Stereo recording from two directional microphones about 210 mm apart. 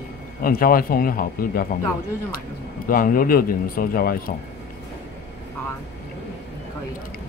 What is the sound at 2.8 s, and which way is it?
Speech, 40° left (ahead or behind).